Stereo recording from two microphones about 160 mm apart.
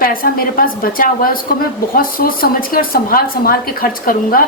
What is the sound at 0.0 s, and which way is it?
A woman's voice, 65° left (ahead or behind).